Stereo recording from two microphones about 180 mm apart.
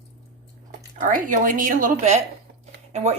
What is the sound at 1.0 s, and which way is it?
A woman's voice, 45° right (ahead or behind).